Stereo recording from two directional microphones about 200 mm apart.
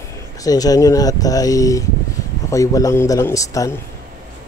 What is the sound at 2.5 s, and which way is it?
A man's voice, 15° left (ahead or behind).